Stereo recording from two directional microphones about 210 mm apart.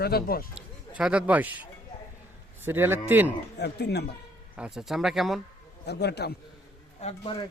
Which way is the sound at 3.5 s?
55° left (ahead or behind).